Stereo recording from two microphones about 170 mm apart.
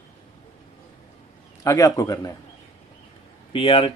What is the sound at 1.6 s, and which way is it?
Speech, 20° left (ahead or behind).